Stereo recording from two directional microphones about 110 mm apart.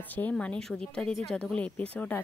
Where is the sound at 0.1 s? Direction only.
10° left (ahead or behind).